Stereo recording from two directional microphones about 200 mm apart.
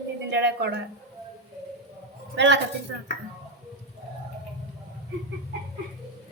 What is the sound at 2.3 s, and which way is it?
Speech, 60° right (ahead or behind).